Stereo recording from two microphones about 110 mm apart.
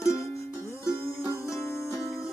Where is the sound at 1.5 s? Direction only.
25° left (ahead or behind).